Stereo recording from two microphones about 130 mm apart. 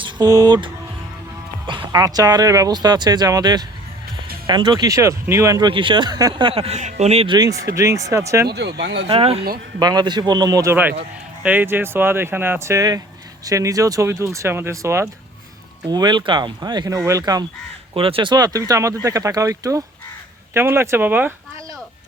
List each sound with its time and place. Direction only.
0.0 s speech: 30° right (ahead or behind)
6.4 s speech: 50° right (ahead or behind)
7.3 s speech: 30° right (ahead or behind)
9.0 s speech: 50° right (ahead or behind)
9.8 s speech: 30° right (ahead or behind)
11.4 s speech: 15° right (ahead or behind)
15.9 s speech: 35° right (ahead or behind)
17.9 s speech: 45° right (ahead or behind); by 21.3 s 15° right (ahead or behind)